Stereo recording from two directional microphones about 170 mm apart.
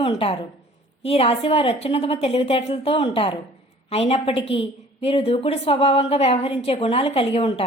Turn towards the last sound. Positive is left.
turn(degrees=35)  # may be behind; listen again after turning